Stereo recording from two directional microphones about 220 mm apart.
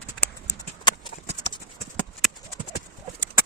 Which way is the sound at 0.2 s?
20° left (ahead or behind).